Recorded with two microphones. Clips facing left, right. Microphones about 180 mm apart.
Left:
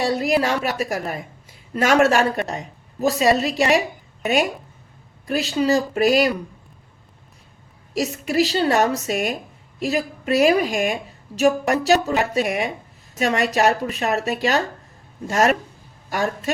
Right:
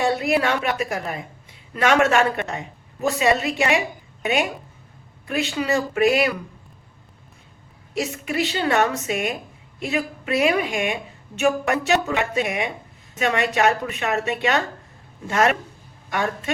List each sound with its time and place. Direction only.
0.0 s a woman's voice: 35° left (ahead or behind)
5.3 s a woman's voice: 35° left (ahead or behind)
7.9 s a woman's voice: 40° left (ahead or behind)